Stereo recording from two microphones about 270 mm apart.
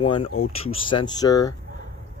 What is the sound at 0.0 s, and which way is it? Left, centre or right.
Speech, centre.